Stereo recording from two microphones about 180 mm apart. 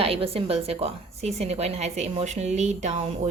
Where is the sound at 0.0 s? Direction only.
30° right (ahead or behind).